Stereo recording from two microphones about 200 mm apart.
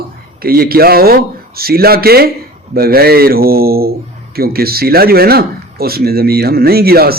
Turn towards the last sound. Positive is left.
turn(degrees=-50)  # may be behind; listen again after turning